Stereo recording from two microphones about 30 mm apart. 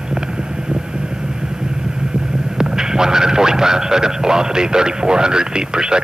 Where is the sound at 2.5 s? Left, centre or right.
Right.